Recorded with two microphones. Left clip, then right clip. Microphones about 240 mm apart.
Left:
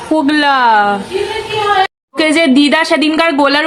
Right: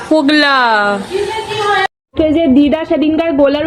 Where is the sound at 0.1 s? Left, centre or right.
Centre.